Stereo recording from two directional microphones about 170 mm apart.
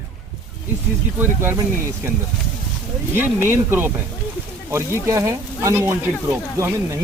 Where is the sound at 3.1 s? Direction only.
10° right (ahead or behind).